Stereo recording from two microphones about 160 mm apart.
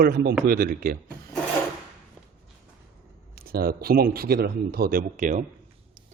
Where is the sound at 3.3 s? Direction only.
70° right (ahead or behind).